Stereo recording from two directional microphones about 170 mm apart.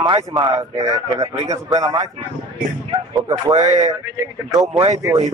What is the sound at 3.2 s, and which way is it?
Speech, 25° right (ahead or behind).